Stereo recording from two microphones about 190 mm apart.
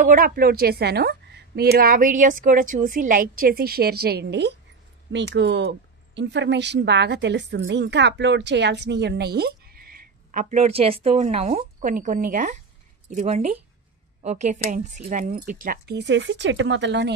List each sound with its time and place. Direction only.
0.0 s a woman's voice: 45° right (ahead or behind); by 17.1 s 65° right (ahead or behind)